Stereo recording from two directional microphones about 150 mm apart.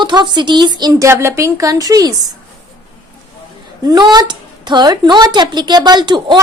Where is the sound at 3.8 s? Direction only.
30° right (ahead or behind).